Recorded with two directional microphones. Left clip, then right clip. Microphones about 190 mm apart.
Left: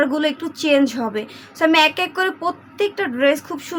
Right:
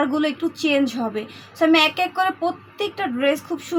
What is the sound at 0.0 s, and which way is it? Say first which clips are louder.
A woman's voice: left 2 dB; 40° left (ahead or behind).